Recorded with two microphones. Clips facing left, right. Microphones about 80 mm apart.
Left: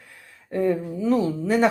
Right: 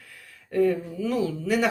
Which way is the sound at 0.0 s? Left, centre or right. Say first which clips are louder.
Left 1 dB; left.